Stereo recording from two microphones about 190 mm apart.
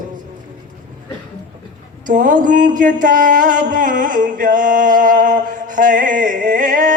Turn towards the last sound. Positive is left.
turn(degrees=-45)  # may be behind; listen again after turning